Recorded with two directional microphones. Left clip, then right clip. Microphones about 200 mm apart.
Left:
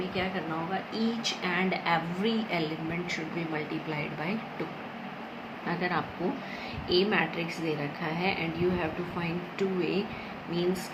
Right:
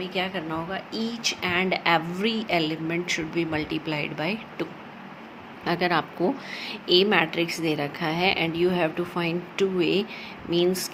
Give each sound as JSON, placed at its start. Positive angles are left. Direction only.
{"t": 0.1, "sound": "speech", "side_deg": -50}
{"t": 5.6, "sound": "speech", "side_deg": -55}